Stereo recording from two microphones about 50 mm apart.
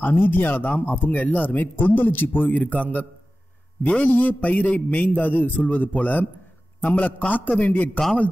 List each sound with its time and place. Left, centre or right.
0.0 s a man's voice: left